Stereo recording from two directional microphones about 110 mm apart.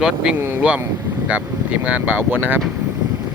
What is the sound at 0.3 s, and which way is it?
Speech, 20° right (ahead or behind).